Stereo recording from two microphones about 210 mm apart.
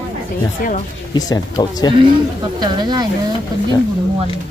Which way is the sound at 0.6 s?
45° left (ahead or behind).